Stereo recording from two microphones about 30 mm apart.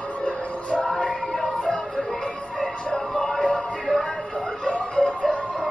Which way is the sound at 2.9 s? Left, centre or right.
Left.